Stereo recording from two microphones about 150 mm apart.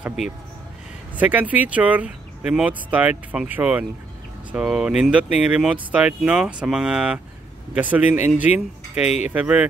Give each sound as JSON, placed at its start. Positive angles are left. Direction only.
{"t": 0.0, "sound": "speech", "side_deg": -5}
{"t": 9.0, "sound": "speech", "side_deg": 50}
{"t": 9.3, "sound": "speech", "side_deg": -10}